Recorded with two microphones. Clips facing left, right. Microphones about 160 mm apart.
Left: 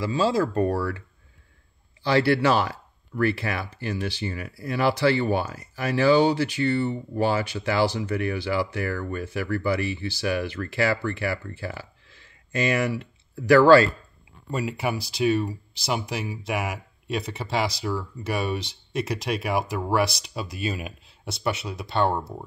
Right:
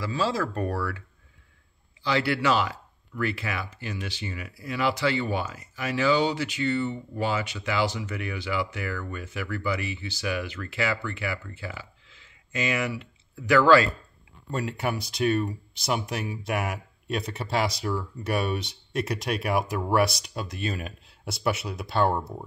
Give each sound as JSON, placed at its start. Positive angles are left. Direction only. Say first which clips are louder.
{"t": 0.0, "sound": "speech", "louder": "left 5 dB", "side_deg": 25}
{"t": 2.1, "sound": "speech", "louder": "left 4 dB", "side_deg": 40}
{"t": 7.3, "sound": "speech", "louder": "left 4 dB", "side_deg": 35}
{"t": 14.5, "sound": "speech", "louder": "left 2 dB", "side_deg": 10}